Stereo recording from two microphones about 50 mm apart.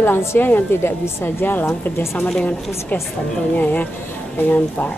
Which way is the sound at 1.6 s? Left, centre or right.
Left.